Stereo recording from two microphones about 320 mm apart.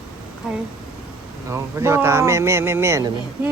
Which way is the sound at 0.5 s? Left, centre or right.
Centre.